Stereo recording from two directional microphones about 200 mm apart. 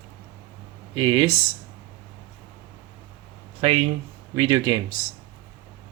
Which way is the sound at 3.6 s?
30° right (ahead or behind).